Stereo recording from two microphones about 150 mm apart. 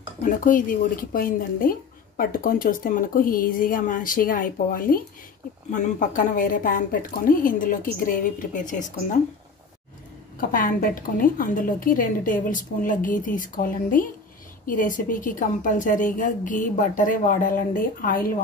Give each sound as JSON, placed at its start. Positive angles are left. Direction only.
{"t": 0.2, "sound": "speech", "side_deg": 60}
{"t": 5.7, "sound": "a woman's voice", "side_deg": 60}
{"t": 10.5, "sound": "a woman's voice", "side_deg": 65}